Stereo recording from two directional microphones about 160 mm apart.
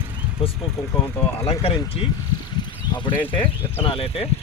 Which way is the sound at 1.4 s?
35° left (ahead or behind).